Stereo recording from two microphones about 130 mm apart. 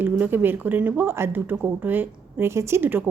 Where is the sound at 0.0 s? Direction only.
15° right (ahead or behind).